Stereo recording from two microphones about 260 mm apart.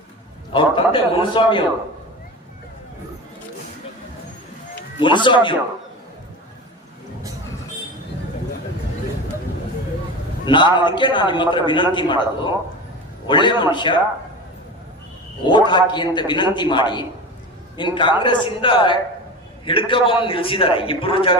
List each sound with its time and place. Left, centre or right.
0.5 s a man's voice: centre
4.9 s a man's voice: centre
10.4 s a man's voice: centre
15.4 s a man's voice: centre